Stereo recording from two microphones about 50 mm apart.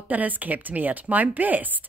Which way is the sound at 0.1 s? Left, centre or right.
Right.